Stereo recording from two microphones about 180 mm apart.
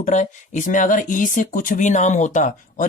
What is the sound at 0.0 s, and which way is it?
Speech, 40° left (ahead or behind).